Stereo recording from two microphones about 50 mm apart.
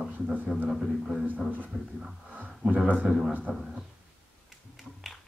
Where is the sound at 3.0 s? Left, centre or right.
Centre.